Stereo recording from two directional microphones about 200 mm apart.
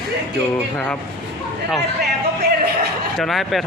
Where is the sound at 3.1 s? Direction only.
Centre (ahead or behind).